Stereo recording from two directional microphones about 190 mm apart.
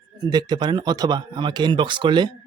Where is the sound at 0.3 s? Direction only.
20° right (ahead or behind).